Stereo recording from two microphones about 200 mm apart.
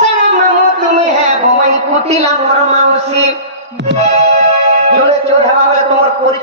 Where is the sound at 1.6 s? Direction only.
30° right (ahead or behind).